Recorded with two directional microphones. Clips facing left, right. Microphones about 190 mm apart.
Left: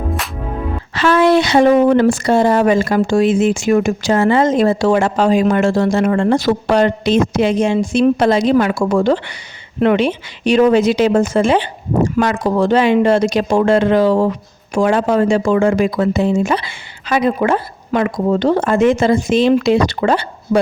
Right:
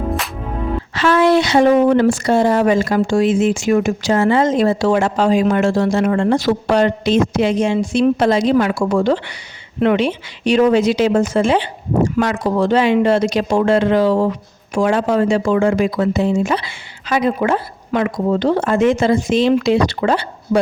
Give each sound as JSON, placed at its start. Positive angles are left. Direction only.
{"t": 0.9, "sound": "speech", "side_deg": 60}